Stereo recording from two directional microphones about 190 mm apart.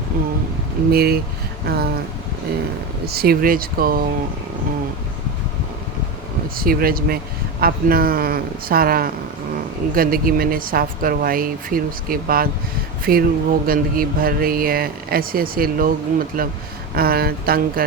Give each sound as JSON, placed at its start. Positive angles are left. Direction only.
{"t": 0.9, "sound": "speech", "side_deg": -55}
{"t": 3.1, "sound": "speech", "side_deg": -55}
{"t": 6.6, "sound": "speech", "side_deg": -50}